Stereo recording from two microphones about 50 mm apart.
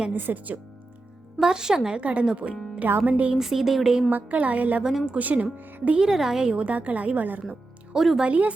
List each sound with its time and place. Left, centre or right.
0.1 s a woman's voice: right
1.4 s speech: centre
2.0 s speech: right
3.3 s speech: centre
4.1 s a woman's voice: right
4.8 s speech: centre
5.1 s a woman's voice: right
6.0 s speech: centre
6.5 s a woman's voice: right
7.9 s speech: centre
8.2 s speech: right